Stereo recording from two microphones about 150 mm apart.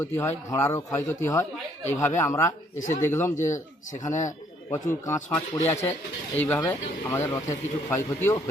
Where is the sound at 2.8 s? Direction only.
55° left (ahead or behind).